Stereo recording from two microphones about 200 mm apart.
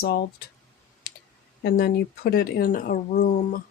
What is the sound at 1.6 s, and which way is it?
Speech, 55° left (ahead or behind).